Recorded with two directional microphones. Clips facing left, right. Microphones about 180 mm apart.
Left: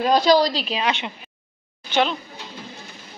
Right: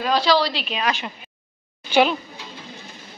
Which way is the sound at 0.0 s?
45° left (ahead or behind).